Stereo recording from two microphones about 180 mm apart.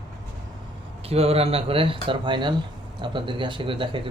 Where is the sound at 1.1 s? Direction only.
35° right (ahead or behind).